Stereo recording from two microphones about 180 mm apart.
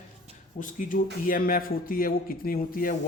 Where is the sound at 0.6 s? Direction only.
45° left (ahead or behind).